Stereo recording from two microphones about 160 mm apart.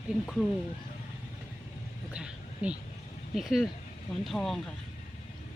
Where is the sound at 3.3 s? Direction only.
Centre (ahead or behind).